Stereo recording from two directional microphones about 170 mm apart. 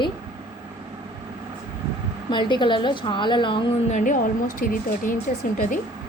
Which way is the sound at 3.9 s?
50° left (ahead or behind).